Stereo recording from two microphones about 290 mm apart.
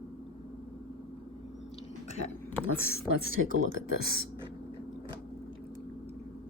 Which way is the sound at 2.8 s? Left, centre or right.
Left.